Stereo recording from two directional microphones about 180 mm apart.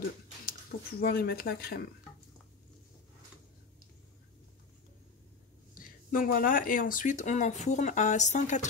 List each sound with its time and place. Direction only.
0.5 s speech: 55° left (ahead or behind)
5.8 s speech: 50° left (ahead or behind)